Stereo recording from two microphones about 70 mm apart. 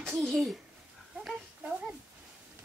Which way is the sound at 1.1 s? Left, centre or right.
Centre.